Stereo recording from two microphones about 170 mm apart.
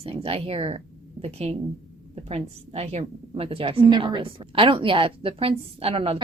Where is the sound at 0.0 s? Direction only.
35° right (ahead or behind).